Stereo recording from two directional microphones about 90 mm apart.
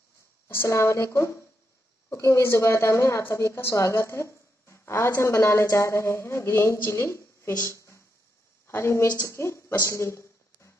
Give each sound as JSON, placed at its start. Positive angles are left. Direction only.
{"t": 0.5, "sound": "a woman's voice", "side_deg": 30}
{"t": 7.6, "sound": "a sound", "side_deg": 30}
{"t": 8.6, "sound": "a woman's voice", "side_deg": 30}